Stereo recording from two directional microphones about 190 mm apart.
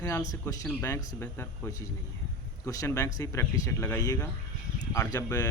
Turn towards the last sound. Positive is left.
turn(degrees=15)  # may be behind; listen again after turning